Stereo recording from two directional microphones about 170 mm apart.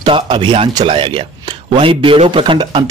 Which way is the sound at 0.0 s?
30° right (ahead or behind).